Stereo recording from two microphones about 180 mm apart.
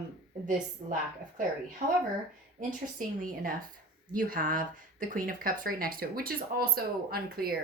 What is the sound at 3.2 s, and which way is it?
Speech, 50° right (ahead or behind).